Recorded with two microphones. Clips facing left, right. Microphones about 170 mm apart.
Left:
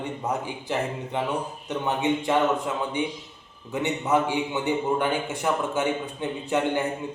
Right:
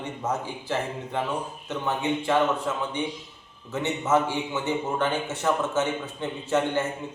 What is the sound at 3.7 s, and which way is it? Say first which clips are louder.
A man's voice: even; 15° left (ahead or behind).